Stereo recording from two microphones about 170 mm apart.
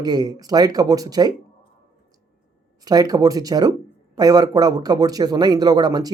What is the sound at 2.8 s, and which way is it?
A man's voice, 20° right (ahead or behind).